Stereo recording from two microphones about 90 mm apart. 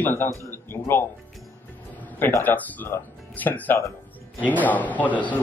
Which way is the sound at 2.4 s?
20° left (ahead or behind).